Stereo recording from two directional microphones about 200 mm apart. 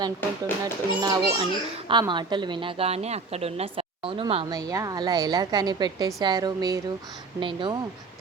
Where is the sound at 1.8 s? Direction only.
25° right (ahead or behind).